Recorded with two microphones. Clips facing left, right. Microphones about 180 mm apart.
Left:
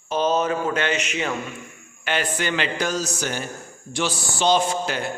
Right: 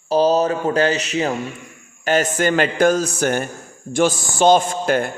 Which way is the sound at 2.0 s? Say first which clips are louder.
Right 7 dB; 45° right (ahead or behind).